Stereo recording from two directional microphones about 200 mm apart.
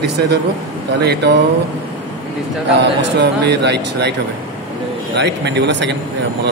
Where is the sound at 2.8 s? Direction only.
60° right (ahead or behind).